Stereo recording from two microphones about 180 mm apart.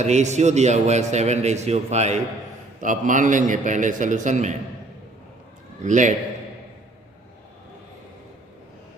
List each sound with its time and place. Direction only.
0.0 s a man's voice: 40° right (ahead or behind)
5.8 s a man's voice: 45° right (ahead or behind)